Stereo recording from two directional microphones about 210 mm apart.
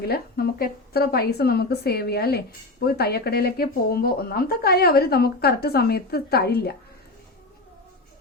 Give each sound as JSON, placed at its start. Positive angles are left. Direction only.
{"t": 0.0, "sound": "speech", "side_deg": 50}